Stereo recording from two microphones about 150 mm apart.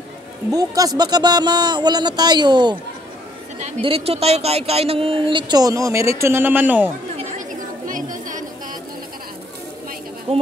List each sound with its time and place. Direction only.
0.5 s speech: 25° right (ahead or behind)
3.8 s speech: 40° right (ahead or behind); by 6.9 s 10° right (ahead or behind)
7.2 s chatter: 60° right (ahead or behind)
10.3 s speech: 50° right (ahead or behind)